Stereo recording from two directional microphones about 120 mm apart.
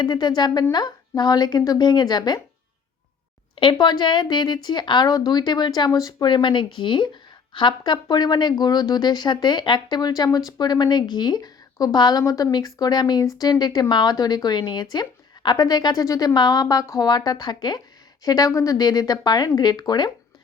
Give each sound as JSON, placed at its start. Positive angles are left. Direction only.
{"t": 0.0, "sound": "speech", "side_deg": 35}
{"t": 3.5, "sound": "speech", "side_deg": 45}